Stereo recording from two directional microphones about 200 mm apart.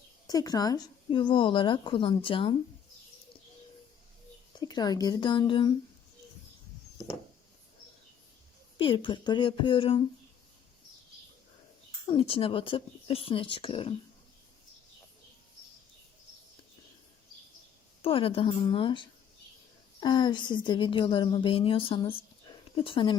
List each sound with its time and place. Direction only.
0.3 s speech: 20° left (ahead or behind)
4.6 s speech: 20° left (ahead or behind)
8.8 s speech: 25° left (ahead or behind)
12.0 s speech: 25° left (ahead or behind)
18.0 s speech: 30° left (ahead or behind)